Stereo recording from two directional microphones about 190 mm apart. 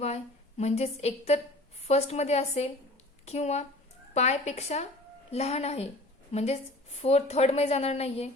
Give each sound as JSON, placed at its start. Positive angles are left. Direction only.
{"t": 0.0, "sound": "a woman's voice", "side_deg": 35}